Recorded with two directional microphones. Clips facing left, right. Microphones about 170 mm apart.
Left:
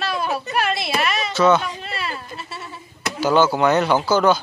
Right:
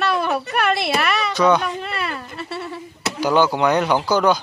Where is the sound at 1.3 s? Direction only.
15° right (ahead or behind).